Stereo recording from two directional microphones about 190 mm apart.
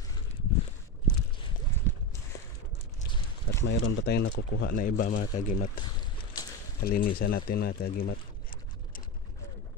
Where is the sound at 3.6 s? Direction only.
65° left (ahead or behind).